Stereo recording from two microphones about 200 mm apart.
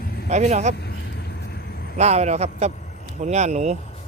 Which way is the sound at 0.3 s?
35° right (ahead or behind).